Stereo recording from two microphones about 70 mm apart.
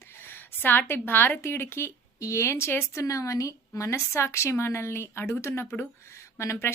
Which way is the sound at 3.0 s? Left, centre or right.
Left.